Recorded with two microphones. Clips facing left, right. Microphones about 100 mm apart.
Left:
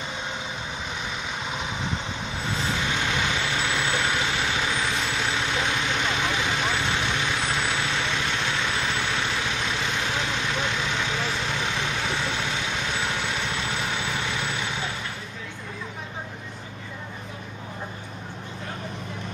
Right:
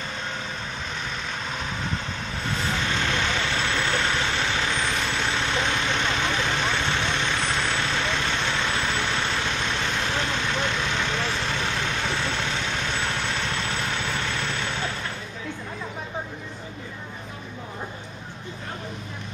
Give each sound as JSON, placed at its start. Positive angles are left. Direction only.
{"t": 1.4, "sound": "vehicle", "side_deg": 15}